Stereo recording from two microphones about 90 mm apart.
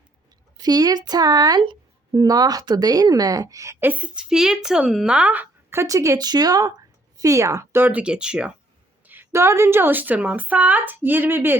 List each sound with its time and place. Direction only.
0.5 s speech: 45° right (ahead or behind)
3.8 s speech: 20° right (ahead or behind)
5.7 s speech: 35° right (ahead or behind)
6.1 s speech: 50° right (ahead or behind); by 8.5 s 10° right (ahead or behind)
9.0 s speech: 25° right (ahead or behind)